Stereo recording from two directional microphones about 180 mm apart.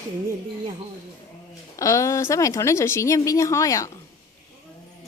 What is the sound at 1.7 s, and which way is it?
A woman's voice, 15° left (ahead or behind).